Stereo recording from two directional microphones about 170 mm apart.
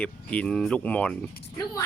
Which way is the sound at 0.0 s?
5° left (ahead or behind).